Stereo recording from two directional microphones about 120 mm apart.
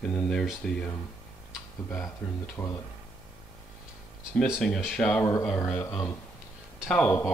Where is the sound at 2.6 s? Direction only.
15° left (ahead or behind).